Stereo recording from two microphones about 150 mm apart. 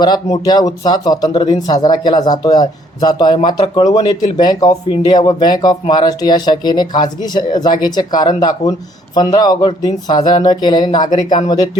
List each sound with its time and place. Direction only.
0.0 s speech: 25° left (ahead or behind)